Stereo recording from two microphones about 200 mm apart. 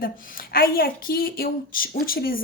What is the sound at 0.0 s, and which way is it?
Speech, 45° left (ahead or behind).